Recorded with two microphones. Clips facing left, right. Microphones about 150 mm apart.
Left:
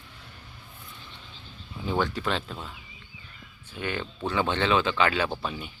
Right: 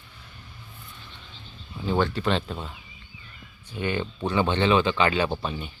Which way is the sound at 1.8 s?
10° left (ahead or behind).